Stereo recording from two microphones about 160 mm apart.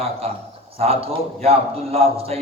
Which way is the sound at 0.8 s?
40° right (ahead or behind).